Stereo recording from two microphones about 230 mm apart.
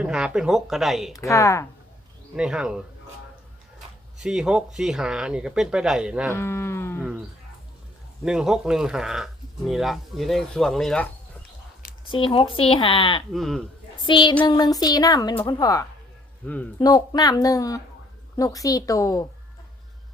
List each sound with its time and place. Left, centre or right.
0.0 s speech: centre
1.1 s a woman's voice: centre
2.3 s speech: centre
4.2 s speech: centre
6.3 s moo: centre
8.2 s speech: centre
12.0 s speech: left
13.3 s speech: centre
14.0 s a woman's voice: centre